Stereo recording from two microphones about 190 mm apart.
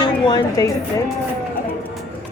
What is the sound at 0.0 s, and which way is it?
A woman's voice, 20° left (ahead or behind).